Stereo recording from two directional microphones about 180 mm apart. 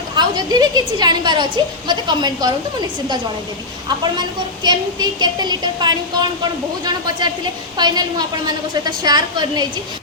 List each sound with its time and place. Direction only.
0.2 s a woman's voice: 20° right (ahead or behind)
4.6 s a woman's voice: 25° right (ahead or behind)